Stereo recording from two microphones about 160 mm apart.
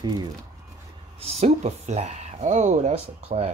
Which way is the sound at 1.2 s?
40° right (ahead or behind).